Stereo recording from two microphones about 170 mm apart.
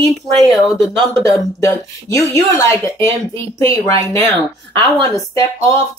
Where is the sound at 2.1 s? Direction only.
15° left (ahead or behind).